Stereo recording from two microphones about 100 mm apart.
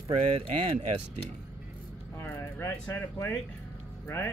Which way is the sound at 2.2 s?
20° left (ahead or behind).